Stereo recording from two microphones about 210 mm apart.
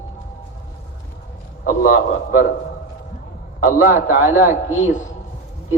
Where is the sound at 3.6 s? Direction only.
40° left (ahead or behind).